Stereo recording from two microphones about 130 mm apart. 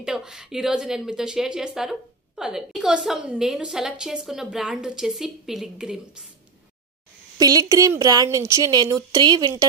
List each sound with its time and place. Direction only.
0.0 s a woman's voice: 5° right (ahead or behind)
7.3 s a woman's voice: 30° right (ahead or behind)